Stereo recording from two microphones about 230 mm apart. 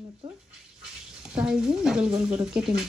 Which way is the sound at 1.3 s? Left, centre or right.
Centre.